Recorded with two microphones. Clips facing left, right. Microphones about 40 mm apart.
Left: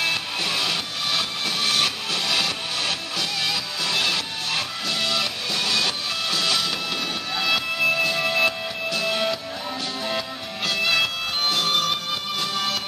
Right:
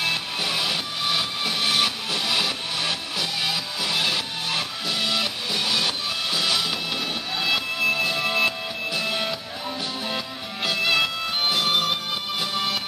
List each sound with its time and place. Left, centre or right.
0.0 s music: centre